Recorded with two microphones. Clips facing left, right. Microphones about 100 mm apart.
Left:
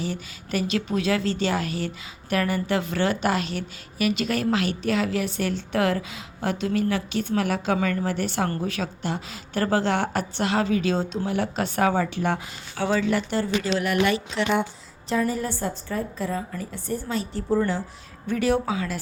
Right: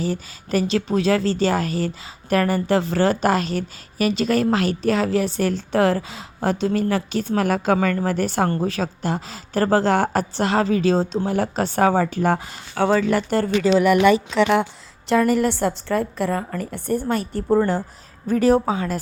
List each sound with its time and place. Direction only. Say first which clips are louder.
0.0 s a woman's voice: right 5 dB; 35° right (ahead or behind)
12.7 s speech: right 5 dB; 55° right (ahead or behind)
15.1 s a woman's voice: right 7 dB; 80° right; by 18.9 s 40° right (ahead or behind)